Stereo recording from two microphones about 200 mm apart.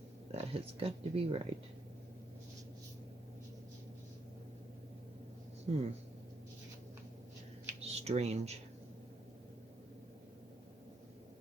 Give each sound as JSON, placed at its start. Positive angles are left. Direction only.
{"t": 0.3, "sound": "speech", "side_deg": -30}
{"t": 5.7, "sound": "speech", "side_deg": -35}
{"t": 7.8, "sound": "a sound", "side_deg": -30}